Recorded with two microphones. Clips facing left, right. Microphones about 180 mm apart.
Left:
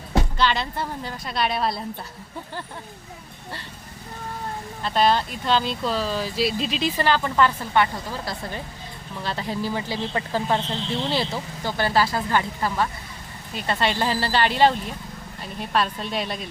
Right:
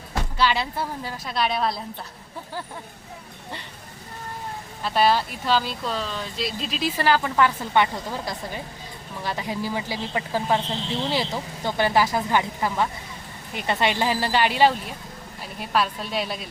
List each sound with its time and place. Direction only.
0.3 s speech: 10° right (ahead or behind)
4.8 s speech: 5° right (ahead or behind)